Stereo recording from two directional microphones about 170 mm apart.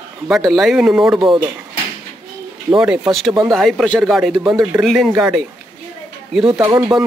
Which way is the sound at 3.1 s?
Centre (ahead or behind).